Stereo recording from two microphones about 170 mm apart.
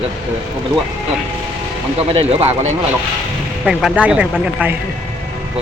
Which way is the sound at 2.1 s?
40° right (ahead or behind).